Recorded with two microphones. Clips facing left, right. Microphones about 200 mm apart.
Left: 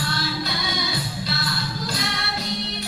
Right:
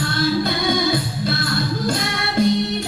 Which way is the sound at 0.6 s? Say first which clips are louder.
Right 9 dB; 50° right (ahead or behind).